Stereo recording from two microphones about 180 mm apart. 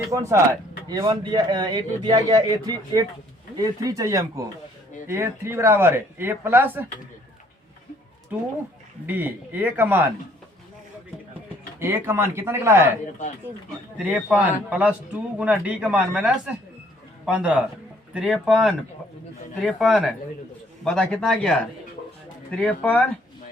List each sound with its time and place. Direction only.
0.1 s speech: 15° right (ahead or behind)
9.0 s speech: 10° right (ahead or behind)
11.8 s speech: 15° right (ahead or behind)
14.0 s speech: 5° right (ahead or behind)
22.5 s speech: 5° left (ahead or behind)